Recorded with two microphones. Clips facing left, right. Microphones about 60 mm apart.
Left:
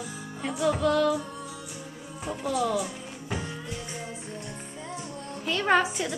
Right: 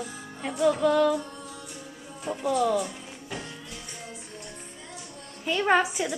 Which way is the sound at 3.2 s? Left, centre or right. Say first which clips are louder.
Left 4 dB; centre.